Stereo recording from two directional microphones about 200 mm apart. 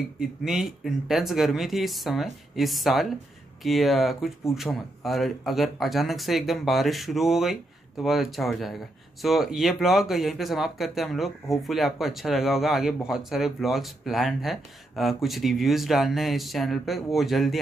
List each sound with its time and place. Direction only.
0.2 s speech: centre (ahead or behind)